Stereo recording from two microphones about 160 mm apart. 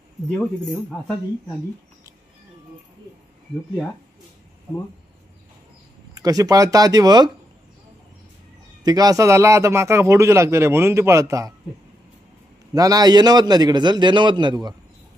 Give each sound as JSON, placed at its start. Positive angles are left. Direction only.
{"t": 0.4, "sound": "speech", "side_deg": 0}
{"t": 6.1, "sound": "a man's voice", "side_deg": -20}
{"t": 8.8, "sound": "a man's voice", "side_deg": -25}
{"t": 12.7, "sound": "a man's voice", "side_deg": -25}